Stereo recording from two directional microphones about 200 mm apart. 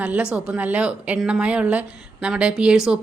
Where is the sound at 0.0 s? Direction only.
5° right (ahead or behind).